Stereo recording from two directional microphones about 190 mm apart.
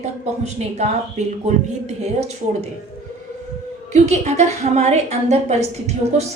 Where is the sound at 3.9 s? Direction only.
35° right (ahead or behind).